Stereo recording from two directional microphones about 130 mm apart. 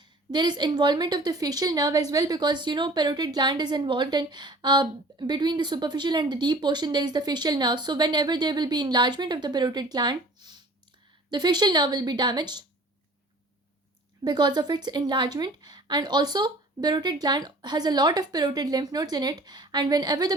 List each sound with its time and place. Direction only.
0.0 s a woman's voice: 35° right (ahead or behind)
14.3 s a woman's voice: 35° right (ahead or behind)